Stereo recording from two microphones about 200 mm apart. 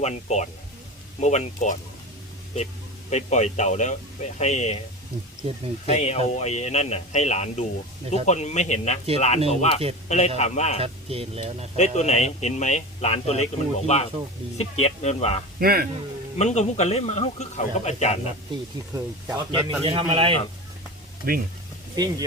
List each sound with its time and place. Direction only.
0.0 s speech: 35° left (ahead or behind)
3.1 s speech: 35° left (ahead or behind)
5.8 s speech: 35° left (ahead or behind)
10.8 s speech: 30° right (ahead or behind)
11.8 s speech: 35° left (ahead or behind)
15.6 s a man's voice: 50° right (ahead or behind)
16.4 s speech: 35° left (ahead or behind)
18.9 s speech: 20° right (ahead or behind)
21.2 s a man's voice: 50° right (ahead or behind)
21.9 s speech: 20° right (ahead or behind)